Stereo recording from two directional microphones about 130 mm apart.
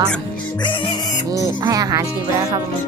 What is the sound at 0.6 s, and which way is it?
Music, 35° left (ahead or behind).